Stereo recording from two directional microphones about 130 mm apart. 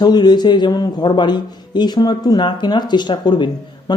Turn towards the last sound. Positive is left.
turn(degrees=35)  # may be behind; listen again after turning